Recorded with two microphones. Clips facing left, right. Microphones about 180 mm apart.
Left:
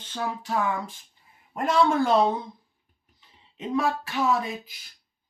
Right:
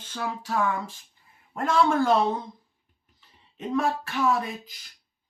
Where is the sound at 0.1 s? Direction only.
20° left (ahead or behind).